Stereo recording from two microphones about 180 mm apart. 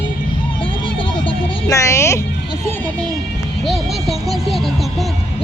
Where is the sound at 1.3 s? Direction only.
20° left (ahead or behind).